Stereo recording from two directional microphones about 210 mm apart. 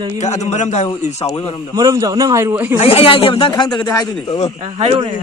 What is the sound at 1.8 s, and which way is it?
Speech, 15° right (ahead or behind).